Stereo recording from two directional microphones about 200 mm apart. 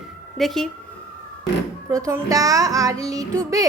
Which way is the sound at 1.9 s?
15° right (ahead or behind).